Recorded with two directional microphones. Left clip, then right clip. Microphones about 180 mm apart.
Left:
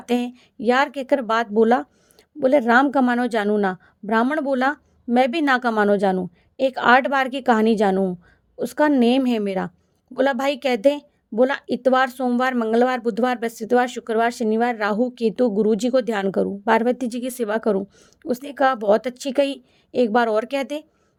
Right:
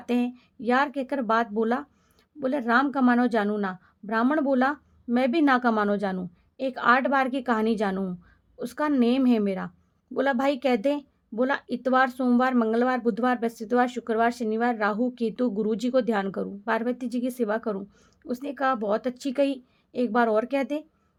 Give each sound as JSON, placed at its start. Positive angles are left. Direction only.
{"t": 0.0, "sound": "a woman's voice", "side_deg": 35}